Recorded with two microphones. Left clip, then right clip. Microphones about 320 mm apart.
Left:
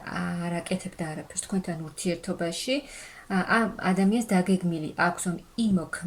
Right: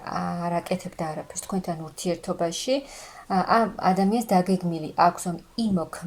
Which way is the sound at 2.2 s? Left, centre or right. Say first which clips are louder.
Right 4 dB; centre.